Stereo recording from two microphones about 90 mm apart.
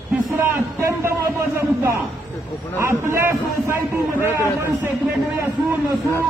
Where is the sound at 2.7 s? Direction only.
30° right (ahead or behind).